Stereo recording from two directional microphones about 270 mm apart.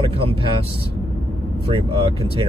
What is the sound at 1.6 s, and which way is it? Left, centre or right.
Speech, right.